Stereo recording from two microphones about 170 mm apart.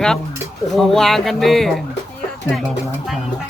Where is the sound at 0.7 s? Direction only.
Centre (ahead or behind).